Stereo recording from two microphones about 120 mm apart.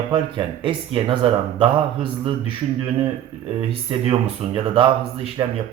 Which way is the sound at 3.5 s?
50° right (ahead or behind).